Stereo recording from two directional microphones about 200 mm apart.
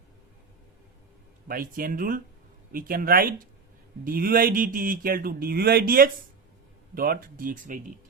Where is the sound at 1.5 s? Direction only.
45° right (ahead or behind).